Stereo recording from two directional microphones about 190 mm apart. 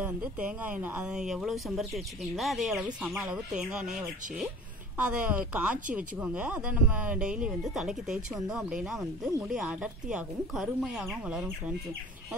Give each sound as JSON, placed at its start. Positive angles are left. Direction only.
{"t": 0.0, "sound": "speech", "side_deg": -10}